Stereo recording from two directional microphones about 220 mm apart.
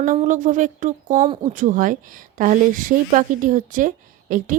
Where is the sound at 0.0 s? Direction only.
35° right (ahead or behind).